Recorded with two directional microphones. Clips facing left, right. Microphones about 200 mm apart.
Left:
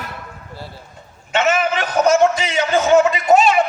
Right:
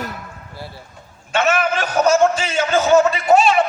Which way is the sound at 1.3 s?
20° left (ahead or behind).